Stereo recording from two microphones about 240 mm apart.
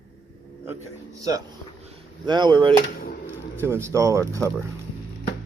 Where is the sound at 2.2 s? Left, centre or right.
Centre.